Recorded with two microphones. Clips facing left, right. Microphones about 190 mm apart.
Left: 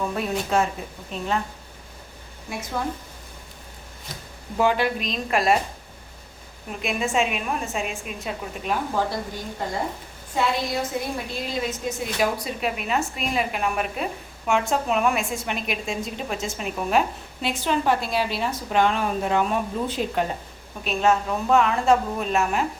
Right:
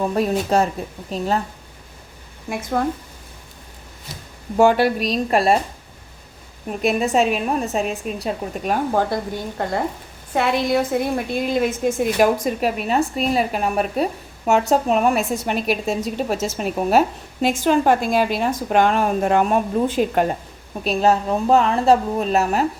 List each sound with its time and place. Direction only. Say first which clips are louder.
0.0 s a woman's voice: right 6 dB; 35° right (ahead or behind)
2.5 s speech: right 7 dB; 55° right (ahead or behind)
4.5 s a woman's voice: right 6 dB; 45° right (ahead or behind)
6.7 s a woman's voice: right 7 dB; 40° right (ahead or behind)
20.8 s a woman's voice: right 4 dB; 35° right (ahead or behind)